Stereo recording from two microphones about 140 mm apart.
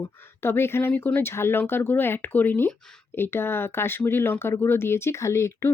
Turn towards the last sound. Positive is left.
turn(degrees=20)  # may be behind; listen again after turning